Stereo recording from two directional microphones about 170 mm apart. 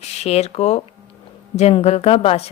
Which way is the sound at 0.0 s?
40° left (ahead or behind).